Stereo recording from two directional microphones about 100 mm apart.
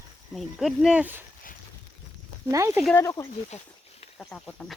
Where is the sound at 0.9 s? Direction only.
20° right (ahead or behind).